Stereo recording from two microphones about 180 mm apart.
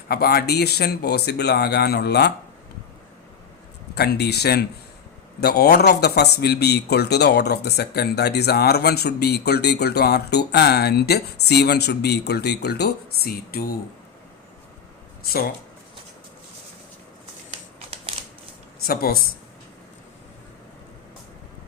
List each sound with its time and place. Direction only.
0.1 s speech: 60° left (ahead or behind)
3.9 s speech: 65° left (ahead or behind)
17.5 s a sound: 30° right (ahead or behind)
18.9 s speech: 55° left (ahead or behind)